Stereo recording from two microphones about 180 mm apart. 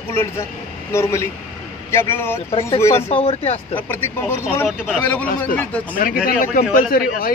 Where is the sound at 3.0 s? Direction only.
35° left (ahead or behind).